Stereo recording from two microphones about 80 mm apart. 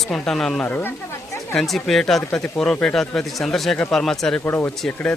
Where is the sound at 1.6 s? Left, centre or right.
Centre.